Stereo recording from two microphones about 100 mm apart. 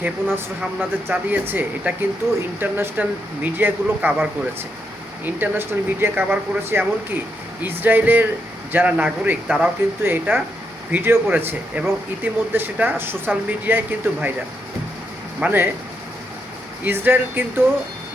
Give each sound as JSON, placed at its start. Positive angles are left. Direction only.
{"t": 0.0, "sound": "speech", "side_deg": -25}
{"t": 15.4, "sound": "speech", "side_deg": -20}
{"t": 16.8, "sound": "speech", "side_deg": -20}